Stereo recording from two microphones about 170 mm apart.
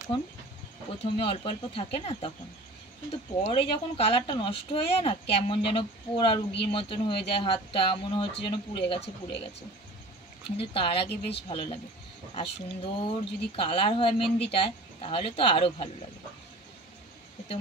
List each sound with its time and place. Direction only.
1.2 s speech: 35° left (ahead or behind)
10.6 s speech: 30° left (ahead or behind)
11.1 s speech: 80° left
11.4 s speech: 35° left (ahead or behind)